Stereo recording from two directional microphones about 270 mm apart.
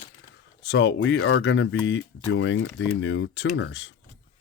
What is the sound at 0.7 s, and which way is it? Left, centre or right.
Speech, left.